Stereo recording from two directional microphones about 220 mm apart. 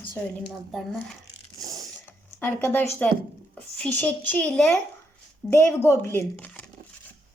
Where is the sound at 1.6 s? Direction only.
15° right (ahead or behind).